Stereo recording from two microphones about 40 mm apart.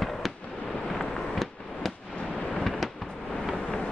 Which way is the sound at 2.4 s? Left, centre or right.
Left.